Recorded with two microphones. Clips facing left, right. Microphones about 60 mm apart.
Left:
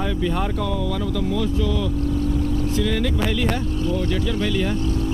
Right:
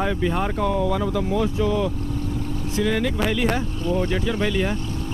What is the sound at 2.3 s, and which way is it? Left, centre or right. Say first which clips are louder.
Vehicle: left 5 dB; right.